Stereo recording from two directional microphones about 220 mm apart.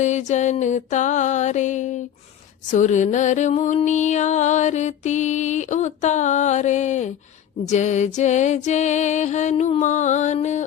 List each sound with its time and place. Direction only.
0.0 s music: 30° left (ahead or behind)